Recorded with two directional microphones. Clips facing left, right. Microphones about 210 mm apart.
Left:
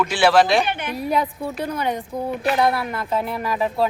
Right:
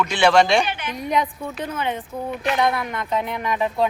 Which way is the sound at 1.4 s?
35° left (ahead or behind).